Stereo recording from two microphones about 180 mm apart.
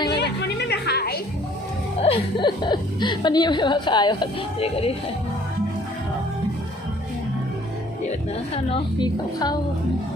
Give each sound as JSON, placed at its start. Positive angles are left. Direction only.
{"t": 0.1, "sound": "music", "side_deg": 65}
{"t": 2.0, "sound": "a woman's voice", "side_deg": 30}
{"t": 8.5, "sound": "a woman's voice", "side_deg": 25}